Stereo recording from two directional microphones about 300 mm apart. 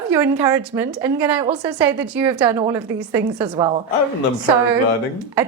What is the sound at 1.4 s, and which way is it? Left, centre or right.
A woman's voice, centre.